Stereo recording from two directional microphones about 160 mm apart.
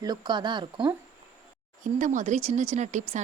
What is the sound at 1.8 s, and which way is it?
Speech, 50° right (ahead or behind).